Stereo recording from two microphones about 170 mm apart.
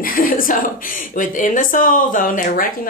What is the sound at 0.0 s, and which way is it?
Speech, 55° left (ahead or behind).